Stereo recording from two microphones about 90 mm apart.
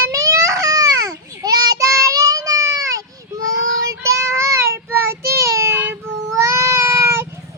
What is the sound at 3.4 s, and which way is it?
Child singing, 40° right (ahead or behind).